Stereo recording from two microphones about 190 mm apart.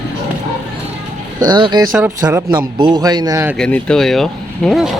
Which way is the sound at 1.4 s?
25° right (ahead or behind).